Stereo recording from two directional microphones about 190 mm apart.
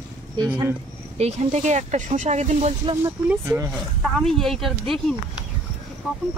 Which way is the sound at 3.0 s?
10° right (ahead or behind).